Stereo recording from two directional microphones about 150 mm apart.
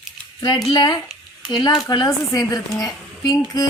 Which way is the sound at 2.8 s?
25° left (ahead or behind).